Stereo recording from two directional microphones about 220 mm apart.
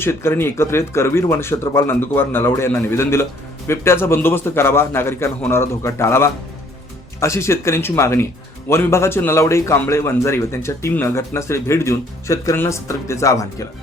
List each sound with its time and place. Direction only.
0.0 s a man's voice: 10° left (ahead or behind)